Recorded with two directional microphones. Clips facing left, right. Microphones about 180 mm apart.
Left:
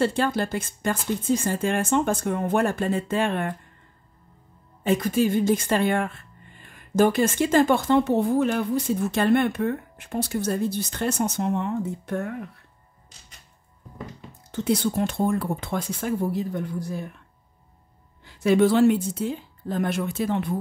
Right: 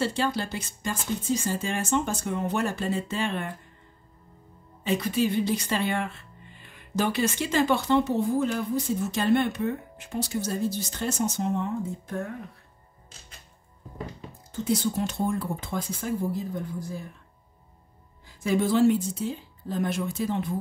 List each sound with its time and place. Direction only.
0.0 s speech: 50° left (ahead or behind)
4.8 s speech: 50° left (ahead or behind); by 12.3 s 70° left (ahead or behind)
14.5 s speech: 65° left (ahead or behind)
18.2 s speech: 70° left (ahead or behind)